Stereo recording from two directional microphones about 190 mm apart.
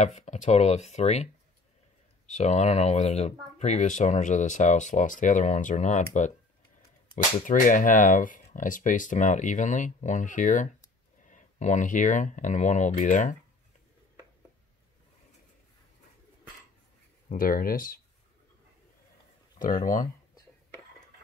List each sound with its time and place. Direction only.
0.0 s speech: 35° left (ahead or behind)
7.3 s speech: 45° left (ahead or behind)
17.3 s speech: 50° left (ahead or behind)
19.6 s speech: 45° left (ahead or behind)